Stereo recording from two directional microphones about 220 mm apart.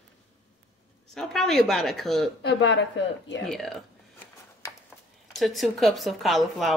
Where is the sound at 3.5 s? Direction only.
Centre (ahead or behind).